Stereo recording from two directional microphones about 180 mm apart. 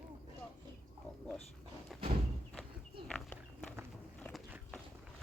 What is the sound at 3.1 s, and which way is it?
Walk, 5° left (ahead or behind).